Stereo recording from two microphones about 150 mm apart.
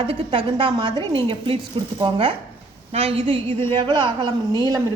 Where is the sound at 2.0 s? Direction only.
35° right (ahead or behind).